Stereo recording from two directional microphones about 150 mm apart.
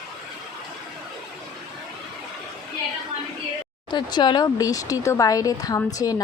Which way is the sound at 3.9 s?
30° left (ahead or behind).